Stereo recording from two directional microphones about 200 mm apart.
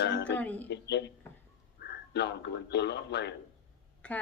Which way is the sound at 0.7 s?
60° left (ahead or behind).